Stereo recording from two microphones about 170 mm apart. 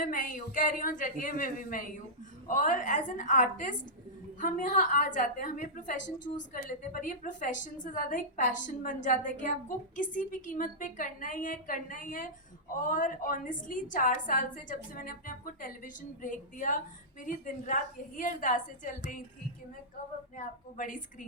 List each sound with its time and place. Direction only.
0.0 s a woman's voice: 50° left (ahead or behind)
20.4 s a woman's voice: 50° left (ahead or behind)